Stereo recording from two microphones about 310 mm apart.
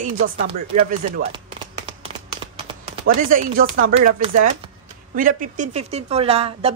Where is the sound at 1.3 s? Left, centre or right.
Centre.